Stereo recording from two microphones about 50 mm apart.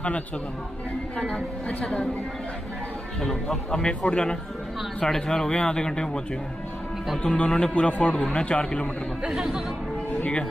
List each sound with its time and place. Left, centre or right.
1.1 s a man's voice: left
3.2 s speech: centre
7.3 s a man's voice: left
9.2 s speech: centre